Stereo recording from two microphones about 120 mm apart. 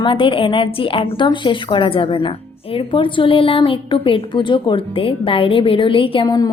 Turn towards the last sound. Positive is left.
turn(degrees=35)  # may be behind; listen again after turning